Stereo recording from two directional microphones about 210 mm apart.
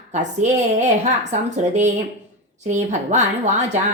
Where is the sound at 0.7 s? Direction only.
35° right (ahead or behind).